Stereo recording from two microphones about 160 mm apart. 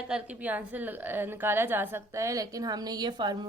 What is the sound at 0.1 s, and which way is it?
A woman's voice, 10° right (ahead or behind).